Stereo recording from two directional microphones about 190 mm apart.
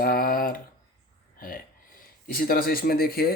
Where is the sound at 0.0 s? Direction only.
50° left (ahead or behind).